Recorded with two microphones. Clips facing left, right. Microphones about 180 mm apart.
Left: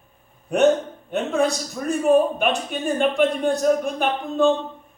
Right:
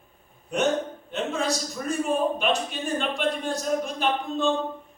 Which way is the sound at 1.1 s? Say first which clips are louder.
Left 7 dB; 60° left (ahead or behind).